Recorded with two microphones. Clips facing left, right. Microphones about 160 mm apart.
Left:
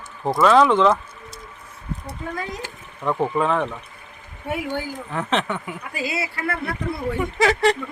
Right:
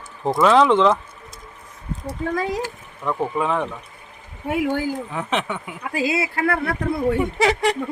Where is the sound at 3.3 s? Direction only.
5° right (ahead or behind).